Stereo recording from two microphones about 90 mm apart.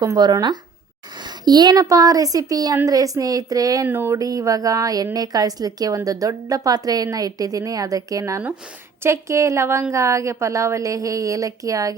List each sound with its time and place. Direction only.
0.0 s a woman's voice: 50° right (ahead or behind)
3.8 s speech: 25° right (ahead or behind)
4.2 s a woman's voice: 40° right (ahead or behind)